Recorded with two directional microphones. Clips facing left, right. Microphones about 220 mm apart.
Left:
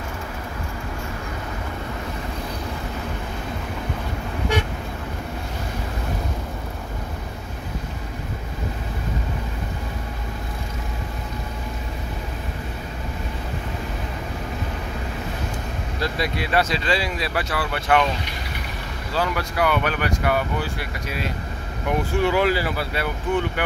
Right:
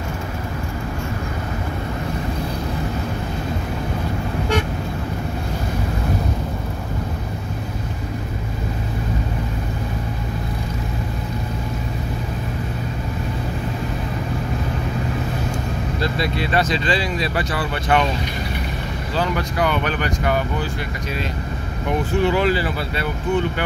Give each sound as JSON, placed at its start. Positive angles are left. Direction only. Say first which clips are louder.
{"t": 16.0, "sound": "speech", "louder": "right 1 dB", "side_deg": 10}
{"t": 19.1, "sound": "speech", "louder": "right 1 dB", "side_deg": 5}
{"t": 22.2, "sound": "speech", "louder": "right 1 dB", "side_deg": 10}